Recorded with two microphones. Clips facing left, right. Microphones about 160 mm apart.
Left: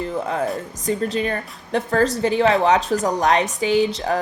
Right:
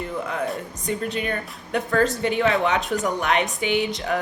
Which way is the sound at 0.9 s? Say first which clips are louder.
Left 4 dB; 35° left (ahead or behind).